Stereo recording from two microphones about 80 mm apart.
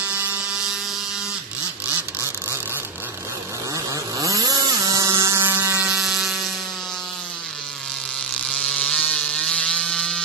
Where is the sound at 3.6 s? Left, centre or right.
Right.